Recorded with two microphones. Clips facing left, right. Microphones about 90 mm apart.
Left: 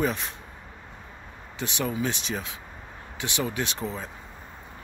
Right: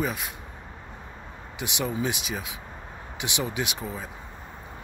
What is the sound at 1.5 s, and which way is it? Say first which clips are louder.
Speech: even; 15° right (ahead or behind).